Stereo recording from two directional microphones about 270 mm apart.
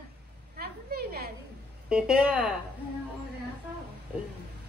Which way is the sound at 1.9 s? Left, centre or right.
Centre.